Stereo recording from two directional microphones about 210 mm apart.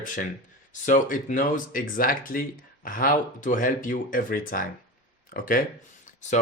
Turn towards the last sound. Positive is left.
turn(degrees=35)  # may be behind; listen again after turning